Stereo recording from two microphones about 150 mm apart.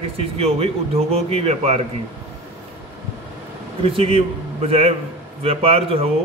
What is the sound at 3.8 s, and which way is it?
A man's voice, 40° right (ahead or behind).